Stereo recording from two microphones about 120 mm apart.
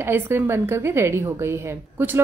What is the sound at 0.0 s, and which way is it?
Speech, 20° right (ahead or behind).